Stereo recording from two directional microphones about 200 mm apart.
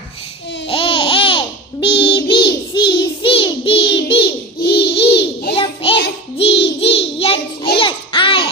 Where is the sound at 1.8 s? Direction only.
25° left (ahead or behind).